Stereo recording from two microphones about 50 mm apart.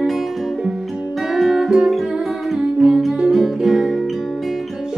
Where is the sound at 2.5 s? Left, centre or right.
Centre.